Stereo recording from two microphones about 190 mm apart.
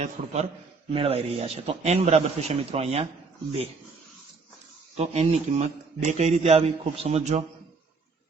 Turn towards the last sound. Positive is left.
turn(degrees=-35)  # may be behind; listen again after turning